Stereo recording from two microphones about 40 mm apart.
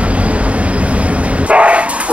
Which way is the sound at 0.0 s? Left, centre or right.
Right.